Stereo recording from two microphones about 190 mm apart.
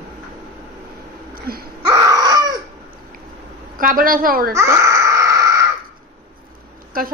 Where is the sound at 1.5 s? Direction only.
55° right (ahead or behind).